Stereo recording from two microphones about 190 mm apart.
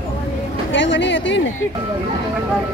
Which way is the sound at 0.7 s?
75° left (ahead or behind).